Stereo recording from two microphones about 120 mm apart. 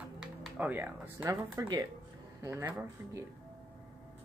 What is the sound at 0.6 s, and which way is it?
Speech, 15° right (ahead or behind).